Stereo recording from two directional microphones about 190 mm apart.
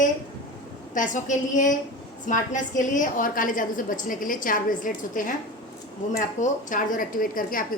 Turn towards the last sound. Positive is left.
turn(degrees=45)  # may be behind; listen again after turning